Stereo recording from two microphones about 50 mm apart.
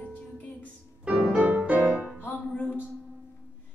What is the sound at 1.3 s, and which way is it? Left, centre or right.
Music, right.